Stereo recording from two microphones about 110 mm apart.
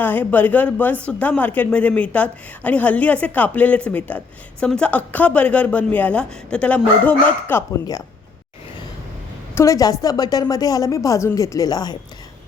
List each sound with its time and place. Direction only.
0.0 s a woman's voice: 15° left (ahead or behind)
9.6 s a woman's voice: 30° left (ahead or behind)